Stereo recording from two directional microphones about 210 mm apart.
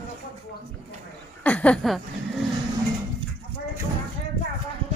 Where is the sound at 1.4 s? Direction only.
5° left (ahead or behind).